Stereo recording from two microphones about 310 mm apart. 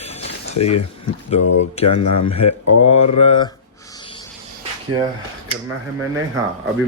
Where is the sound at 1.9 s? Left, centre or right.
Left.